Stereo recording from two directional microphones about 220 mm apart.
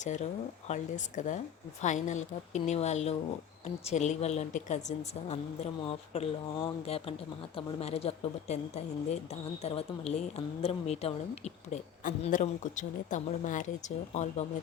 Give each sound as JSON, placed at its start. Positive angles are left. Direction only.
{"t": 0.0, "sound": "speech", "side_deg": 35}